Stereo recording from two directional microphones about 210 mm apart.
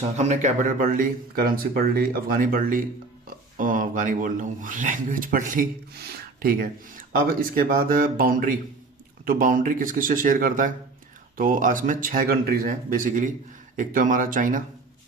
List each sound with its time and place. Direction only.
0.0 s speech: 30° right (ahead or behind)